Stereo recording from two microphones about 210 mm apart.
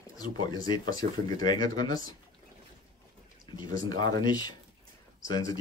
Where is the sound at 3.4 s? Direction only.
15° left (ahead or behind).